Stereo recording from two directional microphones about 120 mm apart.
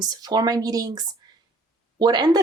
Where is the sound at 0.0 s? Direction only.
35° right (ahead or behind).